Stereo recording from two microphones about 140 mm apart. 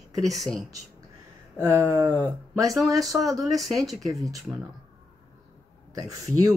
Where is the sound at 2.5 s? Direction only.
25° right (ahead or behind).